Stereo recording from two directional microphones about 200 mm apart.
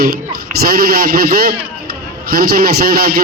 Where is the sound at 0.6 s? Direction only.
50° right (ahead or behind).